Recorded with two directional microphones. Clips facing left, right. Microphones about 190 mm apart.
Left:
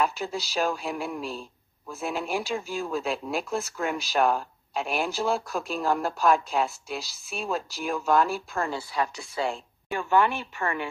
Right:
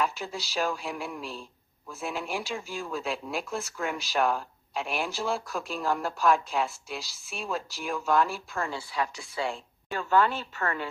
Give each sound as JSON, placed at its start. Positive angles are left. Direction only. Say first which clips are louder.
{"t": 0.0, "sound": "speech", "louder": "left 3 dB", "side_deg": 40}
{"t": 9.8, "sound": "a woman's voice", "louder": "left 1 dB", "side_deg": 15}